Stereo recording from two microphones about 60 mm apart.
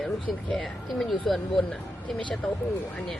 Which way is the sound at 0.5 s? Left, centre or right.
Centre.